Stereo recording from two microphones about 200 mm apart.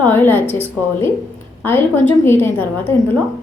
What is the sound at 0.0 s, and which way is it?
Speech, 10° left (ahead or behind).